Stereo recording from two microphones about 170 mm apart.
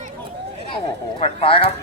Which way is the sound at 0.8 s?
35° left (ahead or behind).